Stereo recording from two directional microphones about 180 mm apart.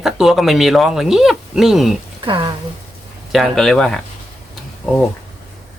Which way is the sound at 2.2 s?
25° right (ahead or behind).